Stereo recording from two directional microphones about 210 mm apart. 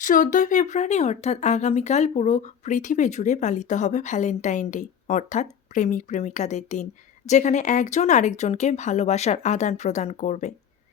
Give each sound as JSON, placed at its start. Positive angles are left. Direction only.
{"t": 0.0, "sound": "speech", "side_deg": 40}